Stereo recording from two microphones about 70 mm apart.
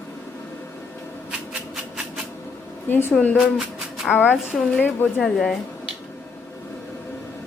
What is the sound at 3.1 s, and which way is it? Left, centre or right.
Speech, centre.